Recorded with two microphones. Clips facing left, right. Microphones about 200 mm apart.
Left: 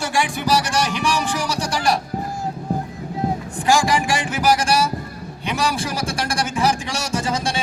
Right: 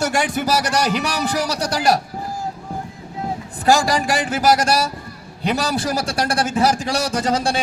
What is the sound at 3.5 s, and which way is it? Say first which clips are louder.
Speech: right 2 dB; 40° right (ahead or behind).